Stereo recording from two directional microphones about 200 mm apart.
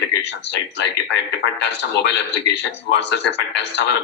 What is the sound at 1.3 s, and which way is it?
A man's voice, 60° left (ahead or behind).